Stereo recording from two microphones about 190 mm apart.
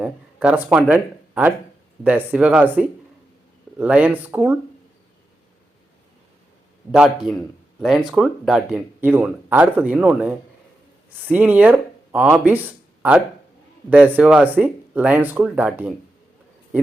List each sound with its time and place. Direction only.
0.0 s speech: 5° right (ahead or behind)
6.9 s a man's voice: 5° right (ahead or behind)